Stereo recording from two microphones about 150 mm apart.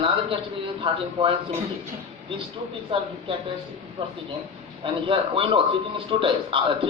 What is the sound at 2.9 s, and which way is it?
A man's voice, 35° right (ahead or behind).